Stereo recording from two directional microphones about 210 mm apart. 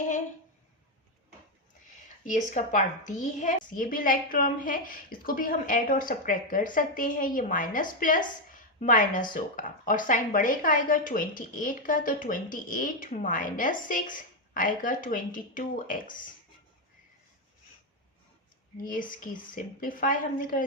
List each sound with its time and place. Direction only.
2.2 s a woman's voice: 35° left (ahead or behind)
18.9 s a woman's voice: 40° left (ahead or behind)